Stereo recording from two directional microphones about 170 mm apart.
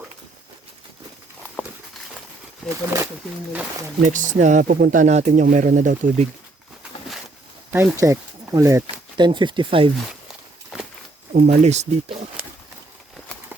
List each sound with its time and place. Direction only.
2.6 s speech: 5° left (ahead or behind)
4.0 s speech: 50° right (ahead or behind)
7.7 s speech: 15° right (ahead or behind); by 9.9 s 30° right (ahead or behind)
10.7 s walk: centre (ahead or behind)
11.3 s speech: 40° right (ahead or behind)